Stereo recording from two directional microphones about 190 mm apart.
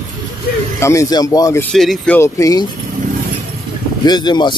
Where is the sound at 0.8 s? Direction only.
15° left (ahead or behind).